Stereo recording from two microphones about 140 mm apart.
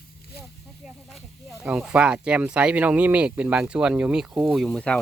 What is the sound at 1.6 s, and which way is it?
Speech, 10° right (ahead or behind).